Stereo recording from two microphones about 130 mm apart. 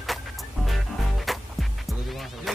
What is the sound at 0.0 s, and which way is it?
Music, centre (ahead or behind).